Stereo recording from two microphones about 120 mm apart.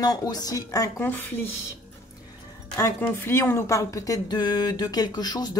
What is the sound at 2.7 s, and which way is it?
Speech, 25° left (ahead or behind).